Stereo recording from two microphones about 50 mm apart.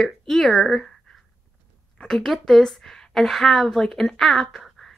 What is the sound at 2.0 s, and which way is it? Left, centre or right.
A woman's voice, centre.